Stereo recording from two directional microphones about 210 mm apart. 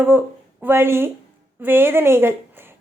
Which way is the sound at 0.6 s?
10° right (ahead or behind).